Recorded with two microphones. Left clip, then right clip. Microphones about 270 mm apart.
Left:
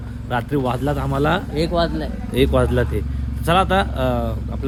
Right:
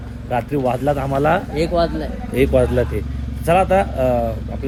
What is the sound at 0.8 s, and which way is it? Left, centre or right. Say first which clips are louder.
Speech: right 3 dB; centre.